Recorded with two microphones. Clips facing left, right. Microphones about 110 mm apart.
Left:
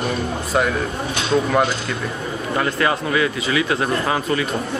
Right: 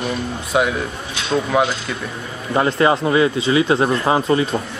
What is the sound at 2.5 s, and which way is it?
Speech, 25° right (ahead or behind).